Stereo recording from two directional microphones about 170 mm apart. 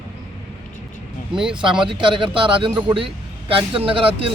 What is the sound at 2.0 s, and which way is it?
Speech, 30° right (ahead or behind).